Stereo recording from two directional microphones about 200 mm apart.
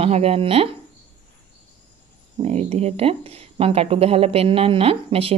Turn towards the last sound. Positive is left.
turn(degrees=-30)  # may be behind; listen again after turning